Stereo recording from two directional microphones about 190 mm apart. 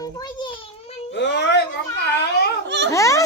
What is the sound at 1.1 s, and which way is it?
Wail, 65° left (ahead or behind).